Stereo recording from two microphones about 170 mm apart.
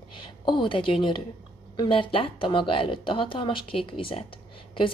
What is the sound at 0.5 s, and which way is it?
A woman's voice, 30° left (ahead or behind).